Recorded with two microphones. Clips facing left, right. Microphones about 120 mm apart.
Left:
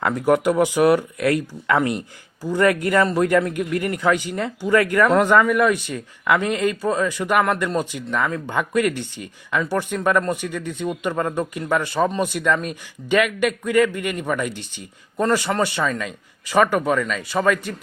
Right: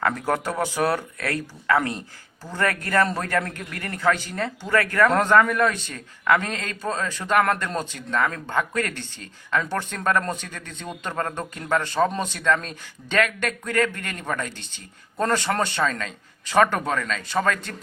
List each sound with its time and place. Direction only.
0.0 s speech: 15° left (ahead or behind)